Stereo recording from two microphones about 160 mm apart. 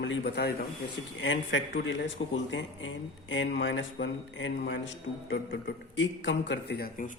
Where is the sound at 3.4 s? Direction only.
90° left.